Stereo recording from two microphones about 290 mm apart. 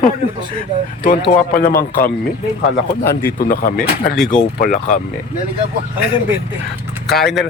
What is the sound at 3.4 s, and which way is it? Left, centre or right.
A man's voice, left.